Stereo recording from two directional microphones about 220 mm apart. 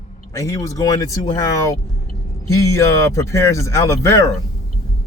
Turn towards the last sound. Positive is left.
turn(degrees=15)  # may be behind; listen again after turning